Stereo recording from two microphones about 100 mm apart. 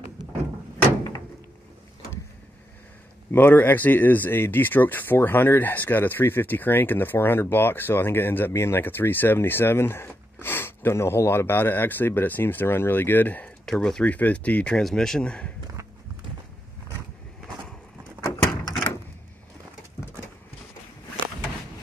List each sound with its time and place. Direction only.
3.3 s speech: 20° left (ahead or behind)
13.7 s speech: 5° left (ahead or behind)